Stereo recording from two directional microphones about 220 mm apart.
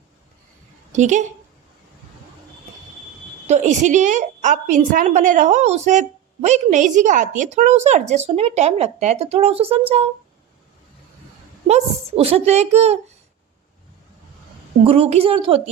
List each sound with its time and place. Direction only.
0.9 s a woman's voice: 35° right (ahead or behind)
3.4 s a woman's voice: 30° right (ahead or behind)
11.7 s speech: 25° right (ahead or behind)
14.8 s speech: 25° right (ahead or behind)